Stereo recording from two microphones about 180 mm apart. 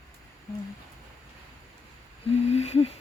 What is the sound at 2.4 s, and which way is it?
Speech, 35° left (ahead or behind).